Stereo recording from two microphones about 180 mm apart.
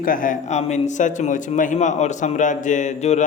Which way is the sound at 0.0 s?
50° left (ahead or behind).